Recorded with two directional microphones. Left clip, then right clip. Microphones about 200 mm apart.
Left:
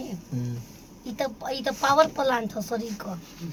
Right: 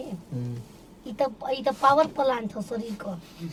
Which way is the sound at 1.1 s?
15° right (ahead or behind).